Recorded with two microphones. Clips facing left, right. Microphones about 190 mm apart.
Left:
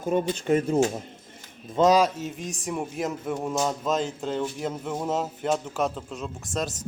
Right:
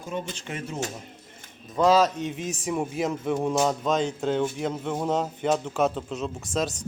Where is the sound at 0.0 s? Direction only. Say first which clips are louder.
Left 8 dB; 50° left (ahead or behind).